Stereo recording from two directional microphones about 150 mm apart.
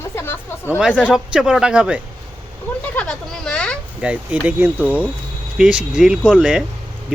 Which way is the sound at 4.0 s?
5° right (ahead or behind).